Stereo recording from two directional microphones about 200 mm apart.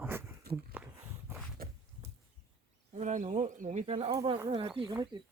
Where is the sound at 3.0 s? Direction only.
35° right (ahead or behind).